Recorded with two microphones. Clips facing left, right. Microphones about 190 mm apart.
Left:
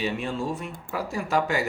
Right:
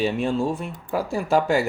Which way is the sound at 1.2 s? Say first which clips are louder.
Right 5 dB; 30° right (ahead or behind).